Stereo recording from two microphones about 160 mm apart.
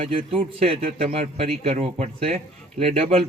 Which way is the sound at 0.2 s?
35° right (ahead or behind).